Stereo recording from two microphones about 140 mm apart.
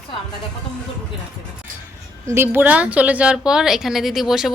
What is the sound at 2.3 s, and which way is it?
A woman's voice, 15° right (ahead or behind).